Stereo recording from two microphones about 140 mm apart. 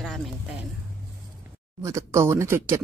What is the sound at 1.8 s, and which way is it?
Speech, 20° right (ahead or behind).